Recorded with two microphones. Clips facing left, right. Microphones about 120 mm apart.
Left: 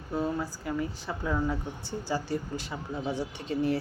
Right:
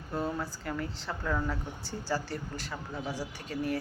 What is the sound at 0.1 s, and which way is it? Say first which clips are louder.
Speech: left 3 dB; centre (ahead or behind).